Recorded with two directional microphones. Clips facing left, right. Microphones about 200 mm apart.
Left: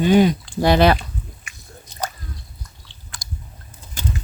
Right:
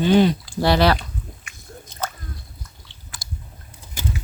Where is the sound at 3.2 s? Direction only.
15° left (ahead or behind).